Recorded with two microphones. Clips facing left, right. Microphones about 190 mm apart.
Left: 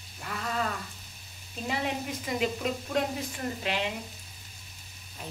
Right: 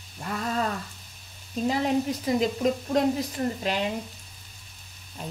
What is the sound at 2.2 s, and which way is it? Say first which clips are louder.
Speech: right 3 dB; 35° right (ahead or behind).